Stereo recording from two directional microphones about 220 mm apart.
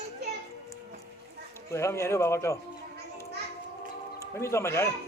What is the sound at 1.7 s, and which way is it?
Speech, 10° left (ahead or behind).